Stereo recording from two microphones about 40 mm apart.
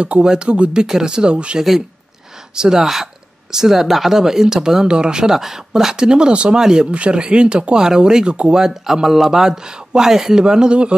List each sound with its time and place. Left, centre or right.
0.2 s speech: right
2.5 s speech: centre
6.9 s speech: right
8.6 s speech: centre